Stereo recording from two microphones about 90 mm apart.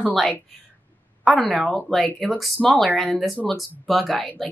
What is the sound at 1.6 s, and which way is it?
Speech, 15° left (ahead or behind).